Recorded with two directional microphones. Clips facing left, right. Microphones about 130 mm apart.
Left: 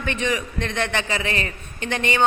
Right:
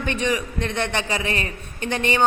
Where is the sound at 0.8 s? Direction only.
15° right (ahead or behind).